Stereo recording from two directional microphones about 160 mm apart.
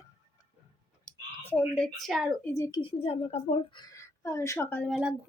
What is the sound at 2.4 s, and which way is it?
Speech, 20° left (ahead or behind).